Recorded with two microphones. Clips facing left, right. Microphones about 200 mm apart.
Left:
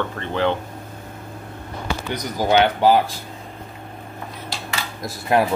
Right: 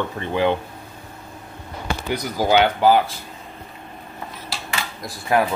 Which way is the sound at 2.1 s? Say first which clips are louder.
Right 1 dB; 10° right (ahead or behind).